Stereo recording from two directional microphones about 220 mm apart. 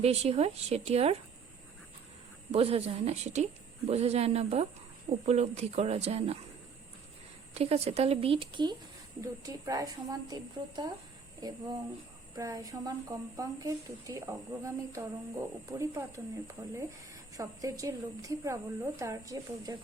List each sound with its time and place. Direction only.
0.0 s a woman's voice: 30° right (ahead or behind)
2.5 s a woman's voice: 25° right (ahead or behind)
7.5 s a woman's voice: 30° right (ahead or behind)